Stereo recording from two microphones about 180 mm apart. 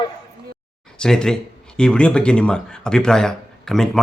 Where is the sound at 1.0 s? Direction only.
5° left (ahead or behind).